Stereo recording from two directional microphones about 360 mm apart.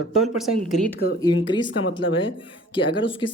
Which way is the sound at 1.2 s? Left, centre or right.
Centre.